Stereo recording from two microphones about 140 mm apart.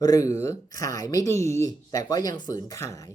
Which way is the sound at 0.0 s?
25° left (ahead or behind).